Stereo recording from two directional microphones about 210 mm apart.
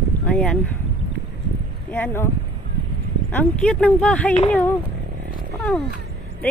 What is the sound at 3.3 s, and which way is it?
Speech, 5° left (ahead or behind).